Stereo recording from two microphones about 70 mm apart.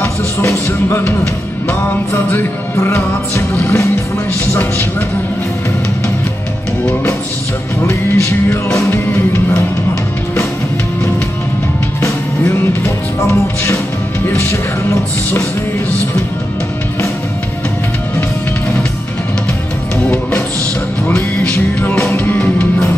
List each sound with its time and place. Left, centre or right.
0.0 s music: left
2.1 s music: left
7.8 s music: left
12.0 s music: left
21.1 s music: left